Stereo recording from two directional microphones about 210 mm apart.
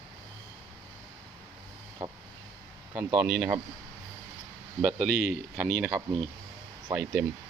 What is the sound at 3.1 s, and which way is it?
Speech, 10° right (ahead or behind).